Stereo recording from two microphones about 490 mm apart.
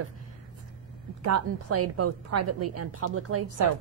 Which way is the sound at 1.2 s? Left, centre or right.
Right.